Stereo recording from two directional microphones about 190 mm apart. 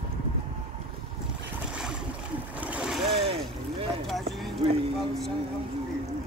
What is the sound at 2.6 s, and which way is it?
Splash, 5° right (ahead or behind).